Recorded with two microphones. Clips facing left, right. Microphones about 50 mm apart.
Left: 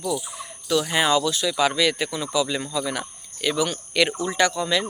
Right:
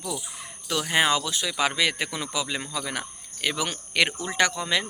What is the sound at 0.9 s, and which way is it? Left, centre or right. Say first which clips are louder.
Speech: right 1 dB; right.